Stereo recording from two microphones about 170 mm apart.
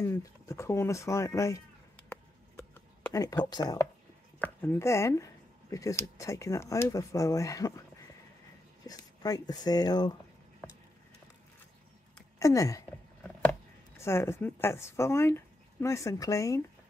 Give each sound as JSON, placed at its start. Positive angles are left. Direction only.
{"t": 0.0, "sound": "speech", "side_deg": 15}
{"t": 3.1, "sound": "speech", "side_deg": 20}
{"t": 8.8, "sound": "speech", "side_deg": 20}
{"t": 12.4, "sound": "speech", "side_deg": 20}